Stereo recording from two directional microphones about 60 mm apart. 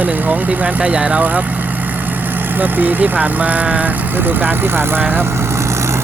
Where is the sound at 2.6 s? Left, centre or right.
Right.